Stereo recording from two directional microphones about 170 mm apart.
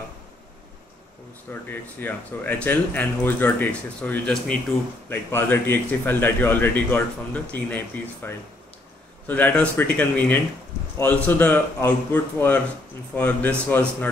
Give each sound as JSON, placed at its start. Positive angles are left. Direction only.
{"t": 1.5, "sound": "speech", "side_deg": 10}